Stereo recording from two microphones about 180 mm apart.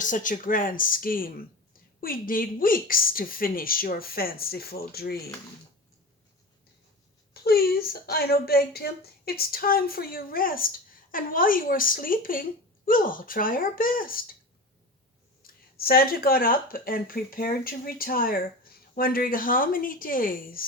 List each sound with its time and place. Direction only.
0.0 s speech: 45° left (ahead or behind)
7.4 s speech: 60° left (ahead or behind)
15.4 s speech: 55° left (ahead or behind)